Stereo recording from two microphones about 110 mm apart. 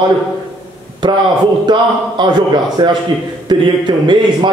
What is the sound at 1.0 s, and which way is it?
A man's voice, 45° right (ahead or behind).